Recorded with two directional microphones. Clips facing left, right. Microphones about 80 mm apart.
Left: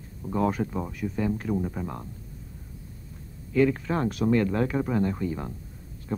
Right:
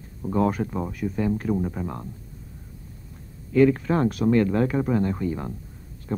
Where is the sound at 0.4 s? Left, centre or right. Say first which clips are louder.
Right 3 dB; right.